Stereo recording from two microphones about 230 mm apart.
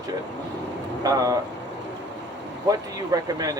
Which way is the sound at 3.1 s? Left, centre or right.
Centre.